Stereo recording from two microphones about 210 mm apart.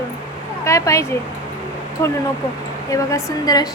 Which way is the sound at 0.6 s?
15° left (ahead or behind).